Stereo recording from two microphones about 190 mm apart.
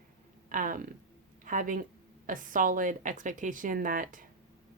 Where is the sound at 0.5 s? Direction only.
45° right (ahead or behind).